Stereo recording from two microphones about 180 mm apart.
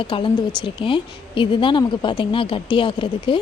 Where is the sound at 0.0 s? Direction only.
30° left (ahead or behind).